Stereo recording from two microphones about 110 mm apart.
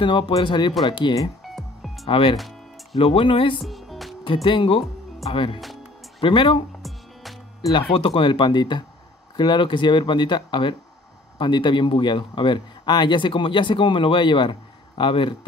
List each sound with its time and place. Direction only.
0.0 s speech: 50° left (ahead or behind)
1.5 s music: centre (ahead or behind)
2.0 s speech: 50° left (ahead or behind)
2.3 s music: centre (ahead or behind)
3.0 s speech: 60° left (ahead or behind)
3.5 s music: centre (ahead or behind)
4.5 s speech: 55° left (ahead or behind)
7.7 s speech: 55° left (ahead or behind)